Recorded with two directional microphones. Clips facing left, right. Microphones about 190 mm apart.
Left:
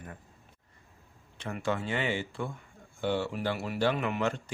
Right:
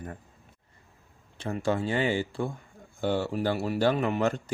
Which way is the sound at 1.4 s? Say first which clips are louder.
Right 4 dB; 35° right (ahead or behind).